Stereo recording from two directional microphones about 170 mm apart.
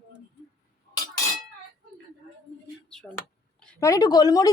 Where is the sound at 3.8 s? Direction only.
20° left (ahead or behind).